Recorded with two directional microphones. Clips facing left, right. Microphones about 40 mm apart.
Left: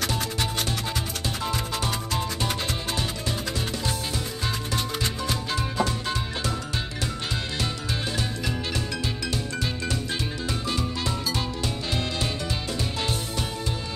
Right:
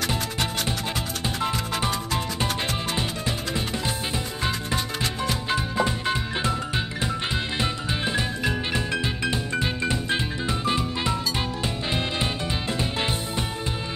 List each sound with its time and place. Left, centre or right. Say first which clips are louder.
1.4 s music: right 3 dB; right
5.2 s music: right 2 dB; right